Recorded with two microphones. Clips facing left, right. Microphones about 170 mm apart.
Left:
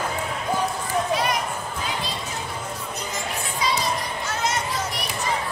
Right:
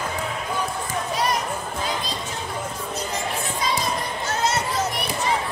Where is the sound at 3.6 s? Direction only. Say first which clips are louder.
Left 1 dB; 45° right (ahead or behind).